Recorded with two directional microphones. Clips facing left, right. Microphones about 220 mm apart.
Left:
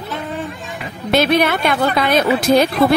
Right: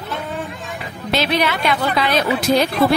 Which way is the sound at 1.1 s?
50° left (ahead or behind).